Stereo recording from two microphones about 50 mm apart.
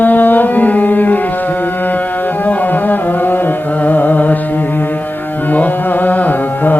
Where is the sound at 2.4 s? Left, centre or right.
Left.